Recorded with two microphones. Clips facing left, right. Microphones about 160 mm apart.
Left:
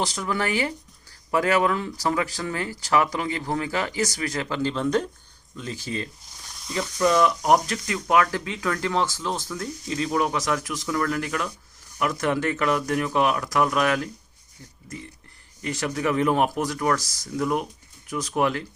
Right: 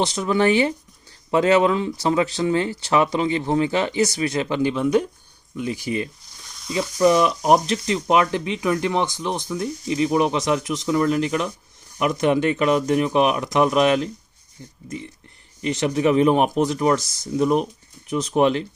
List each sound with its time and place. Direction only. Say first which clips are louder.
0.0 s speech: right 7 dB; 20° right (ahead or behind)